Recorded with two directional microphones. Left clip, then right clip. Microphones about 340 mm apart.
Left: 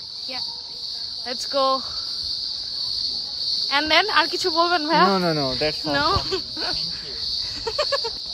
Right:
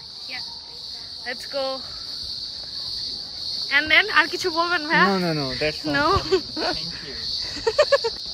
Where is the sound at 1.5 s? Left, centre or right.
Centre.